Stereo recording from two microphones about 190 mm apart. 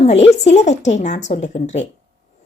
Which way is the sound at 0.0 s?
35° left (ahead or behind).